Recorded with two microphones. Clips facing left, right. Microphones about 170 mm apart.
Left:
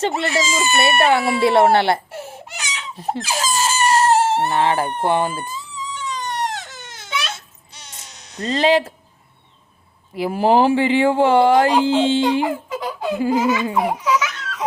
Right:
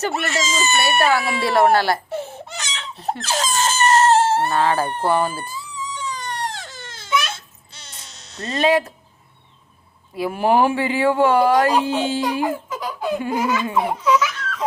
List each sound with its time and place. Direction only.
0.3 s speech: 10° left (ahead or behind)
0.8 s speech: 25° left (ahead or behind)
2.2 s baby cry: 10° left (ahead or behind)
8.5 s speech: 30° left (ahead or behind)
10.2 s speech: 30° left (ahead or behind)